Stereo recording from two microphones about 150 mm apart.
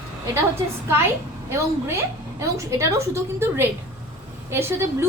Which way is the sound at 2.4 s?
20° right (ahead or behind).